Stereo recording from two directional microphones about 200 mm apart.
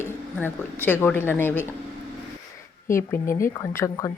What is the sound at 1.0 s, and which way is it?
Speech, 10° left (ahead or behind).